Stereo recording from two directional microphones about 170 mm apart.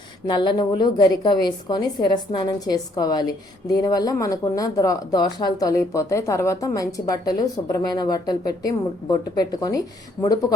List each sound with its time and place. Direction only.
0.3 s speech: 25° left (ahead or behind)